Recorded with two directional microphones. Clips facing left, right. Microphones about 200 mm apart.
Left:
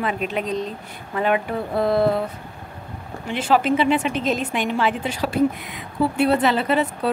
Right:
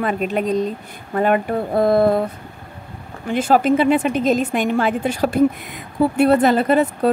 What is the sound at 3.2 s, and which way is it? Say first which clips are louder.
A woman's voice: right 4 dB; 45° right (ahead or behind).